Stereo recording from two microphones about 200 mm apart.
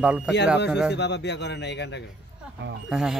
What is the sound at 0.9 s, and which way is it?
Speech, 60° left (ahead or behind).